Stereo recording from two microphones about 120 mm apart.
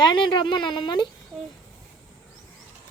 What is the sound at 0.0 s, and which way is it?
Speech, 40° left (ahead or behind).